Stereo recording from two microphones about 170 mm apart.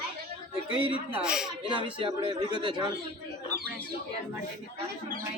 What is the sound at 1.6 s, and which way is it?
Speech, 30° right (ahead or behind).